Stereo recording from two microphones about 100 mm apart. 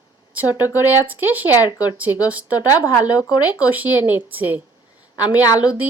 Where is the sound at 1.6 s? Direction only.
40° left (ahead or behind).